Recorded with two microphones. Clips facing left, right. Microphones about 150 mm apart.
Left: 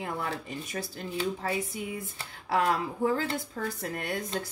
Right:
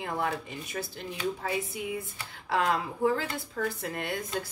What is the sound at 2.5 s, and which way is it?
A woman's voice, 40° left (ahead or behind).